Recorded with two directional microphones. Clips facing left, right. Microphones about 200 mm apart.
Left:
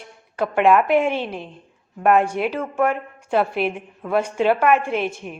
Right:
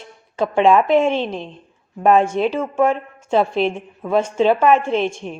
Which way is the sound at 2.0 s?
25° right (ahead or behind).